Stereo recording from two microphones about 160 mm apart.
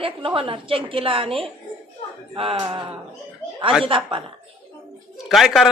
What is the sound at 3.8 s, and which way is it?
Speech, 35° right (ahead or behind).